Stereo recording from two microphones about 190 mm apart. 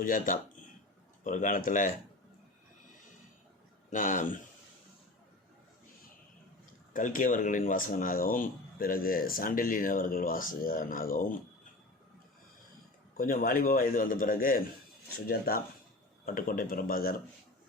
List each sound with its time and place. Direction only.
0.0 s speech: 45° left (ahead or behind)
3.8 s speech: 45° left (ahead or behind)
6.9 s speech: 45° left (ahead or behind)
13.1 s speech: 50° left (ahead or behind)